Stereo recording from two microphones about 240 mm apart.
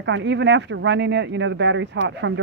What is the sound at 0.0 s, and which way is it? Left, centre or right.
Speech, right.